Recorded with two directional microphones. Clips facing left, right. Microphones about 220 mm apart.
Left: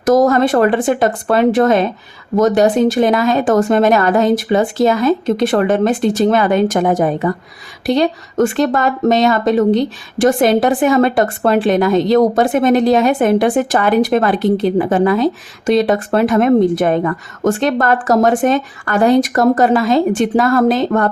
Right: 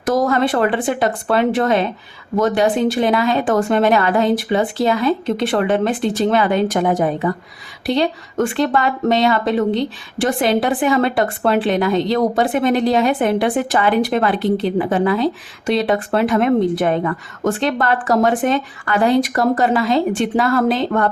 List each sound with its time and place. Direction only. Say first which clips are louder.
0.0 s speech: left 5 dB; 45° left (ahead or behind)